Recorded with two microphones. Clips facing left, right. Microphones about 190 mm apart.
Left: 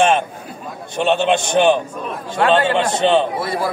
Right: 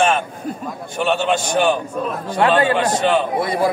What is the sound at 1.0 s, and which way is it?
A man's voice, 25° left (ahead or behind).